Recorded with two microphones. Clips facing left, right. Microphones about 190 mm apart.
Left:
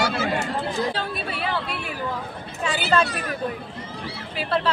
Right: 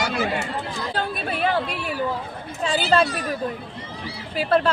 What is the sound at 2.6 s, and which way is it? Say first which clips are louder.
Speech: right 2 dB; 30° right (ahead or behind).